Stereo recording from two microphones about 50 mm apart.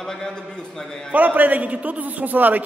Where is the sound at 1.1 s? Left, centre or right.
Right.